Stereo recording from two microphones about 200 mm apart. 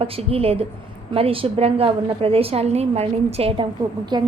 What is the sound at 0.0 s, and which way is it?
A woman's voice, 30° right (ahead or behind).